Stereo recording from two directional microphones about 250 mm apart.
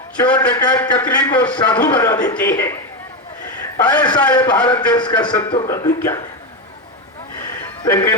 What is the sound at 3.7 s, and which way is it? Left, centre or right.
A man's voice, centre.